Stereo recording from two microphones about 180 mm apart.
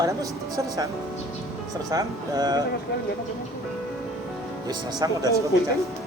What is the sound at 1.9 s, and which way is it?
Speech, 20° right (ahead or behind).